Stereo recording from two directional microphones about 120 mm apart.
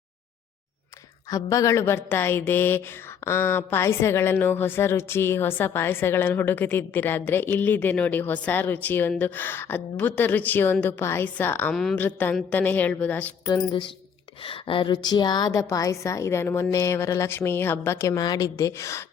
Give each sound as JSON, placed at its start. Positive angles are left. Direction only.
{"t": 1.3, "sound": "a woman's voice", "side_deg": 30}
{"t": 11.7, "sound": "a woman's voice", "side_deg": 5}
{"t": 11.9, "sound": "a woman's voice", "side_deg": 15}
{"t": 14.4, "sound": "a woman's voice", "side_deg": 45}